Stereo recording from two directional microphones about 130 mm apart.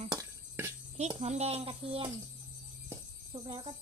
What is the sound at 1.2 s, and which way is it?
Speech, 55° right (ahead or behind).